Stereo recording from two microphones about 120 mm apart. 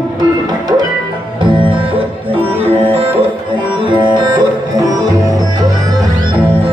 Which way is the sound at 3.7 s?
40° right (ahead or behind).